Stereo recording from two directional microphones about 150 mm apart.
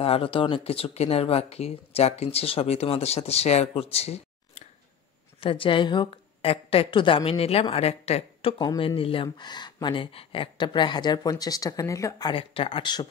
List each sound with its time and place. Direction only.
0.0 s a woman's voice: 40° left (ahead or behind); by 12.3 s 20° left (ahead or behind)
12.3 s a woman's voice: 35° left (ahead or behind)